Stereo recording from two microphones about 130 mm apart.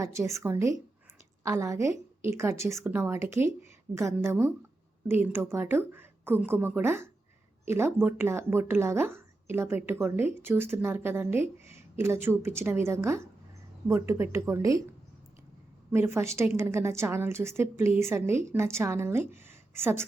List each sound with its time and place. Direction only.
0.0 s speech: 25° right (ahead or behind)
15.9 s speech: 20° right (ahead or behind)